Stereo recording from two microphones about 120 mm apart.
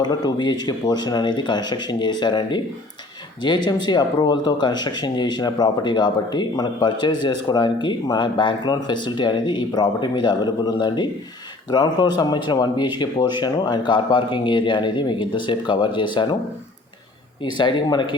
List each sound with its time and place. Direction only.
0.0 s speech: 35° left (ahead or behind)
17.4 s speech: 40° left (ahead or behind)